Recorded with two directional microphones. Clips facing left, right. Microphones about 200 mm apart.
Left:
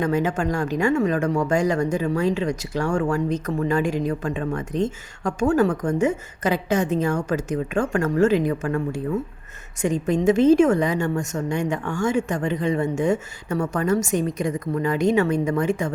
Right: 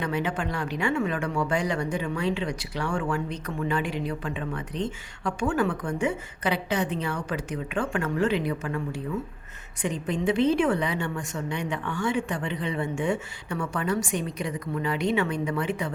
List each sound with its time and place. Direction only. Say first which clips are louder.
0.0 s speech: left 6 dB; 45° left (ahead or behind)